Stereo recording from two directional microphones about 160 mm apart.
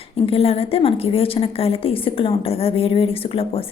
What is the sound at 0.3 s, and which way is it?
A woman's voice, 40° left (ahead or behind).